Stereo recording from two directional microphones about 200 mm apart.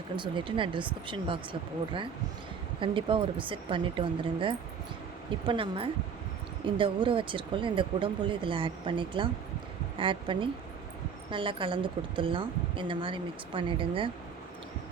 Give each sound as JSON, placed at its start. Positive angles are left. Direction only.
{"t": 0.2, "sound": "a woman's voice", "side_deg": -25}
{"t": 2.8, "sound": "a woman's voice", "side_deg": -25}